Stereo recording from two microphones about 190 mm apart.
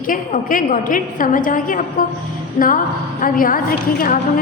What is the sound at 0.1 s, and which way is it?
A woman's voice, 45° left (ahead or behind).